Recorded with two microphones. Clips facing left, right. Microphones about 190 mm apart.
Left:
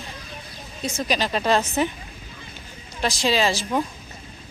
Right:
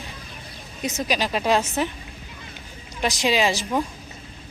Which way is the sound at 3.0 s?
15° right (ahead or behind).